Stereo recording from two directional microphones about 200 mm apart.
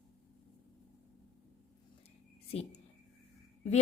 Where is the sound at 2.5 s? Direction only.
30° left (ahead or behind).